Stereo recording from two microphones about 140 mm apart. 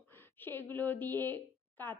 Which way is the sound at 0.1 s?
15° left (ahead or behind).